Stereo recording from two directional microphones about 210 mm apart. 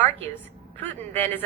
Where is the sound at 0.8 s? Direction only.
10° left (ahead or behind).